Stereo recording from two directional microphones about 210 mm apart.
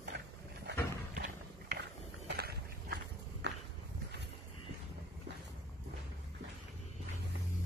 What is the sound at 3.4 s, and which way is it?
Walk, 55° right (ahead or behind).